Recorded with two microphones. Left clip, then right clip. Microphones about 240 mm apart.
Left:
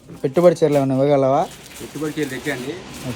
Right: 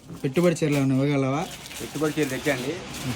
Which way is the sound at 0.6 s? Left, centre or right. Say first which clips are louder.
Left 8 dB; left.